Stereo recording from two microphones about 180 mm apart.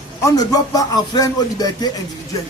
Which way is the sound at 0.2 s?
20° left (ahead or behind).